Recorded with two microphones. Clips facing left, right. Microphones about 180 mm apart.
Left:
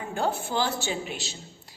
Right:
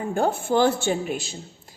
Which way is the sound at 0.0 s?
50° right (ahead or behind).